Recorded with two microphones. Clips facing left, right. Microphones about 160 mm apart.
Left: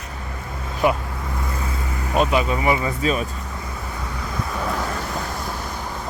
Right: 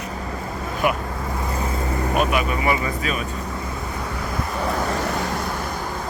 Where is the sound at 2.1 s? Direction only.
25° left (ahead or behind).